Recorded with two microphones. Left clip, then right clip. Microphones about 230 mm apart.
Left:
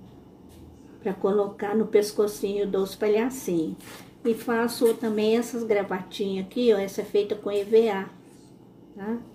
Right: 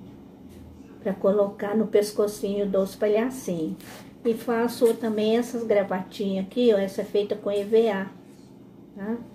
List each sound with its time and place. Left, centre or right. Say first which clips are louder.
1.0 s a woman's voice: right 2 dB; left
4.4 s a woman's voice: right 2 dB; left